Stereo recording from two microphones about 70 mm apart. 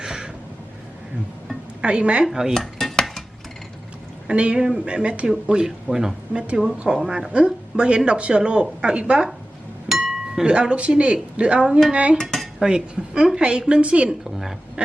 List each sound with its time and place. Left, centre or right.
0.0 s a sound: centre
1.8 s a woman's voice: centre
2.6 s cutlery: centre
4.3 s a woman's voice: centre
10.4 s a woman's voice: centre
12.1 s dishes: centre
12.5 s a woman's voice: centre